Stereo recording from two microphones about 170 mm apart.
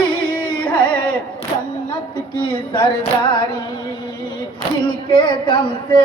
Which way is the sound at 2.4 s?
30° left (ahead or behind).